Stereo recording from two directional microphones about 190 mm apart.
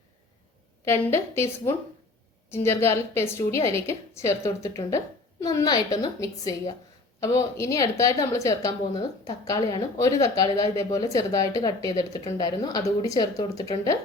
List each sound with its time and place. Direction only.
0.9 s a woman's voice: 15° left (ahead or behind)